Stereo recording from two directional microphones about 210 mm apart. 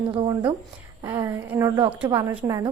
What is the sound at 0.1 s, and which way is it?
A woman's voice, 20° right (ahead or behind).